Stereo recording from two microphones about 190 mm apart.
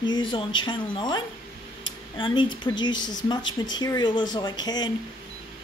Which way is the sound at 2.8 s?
20° left (ahead or behind).